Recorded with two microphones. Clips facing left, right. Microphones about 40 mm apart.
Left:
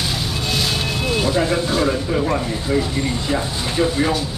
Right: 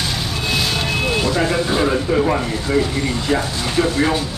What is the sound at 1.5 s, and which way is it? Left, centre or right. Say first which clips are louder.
Speech: right 1 dB; centre.